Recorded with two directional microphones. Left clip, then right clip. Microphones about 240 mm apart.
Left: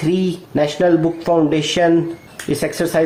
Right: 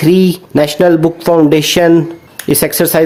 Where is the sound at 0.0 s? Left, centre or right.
Right.